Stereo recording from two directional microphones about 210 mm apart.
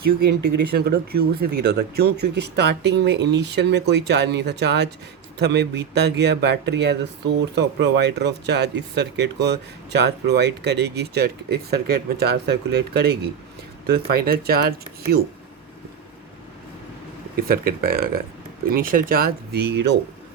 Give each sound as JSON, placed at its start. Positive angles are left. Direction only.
{"t": 0.3, "sound": "speech", "side_deg": -50}
{"t": 17.3, "sound": "speech", "side_deg": -45}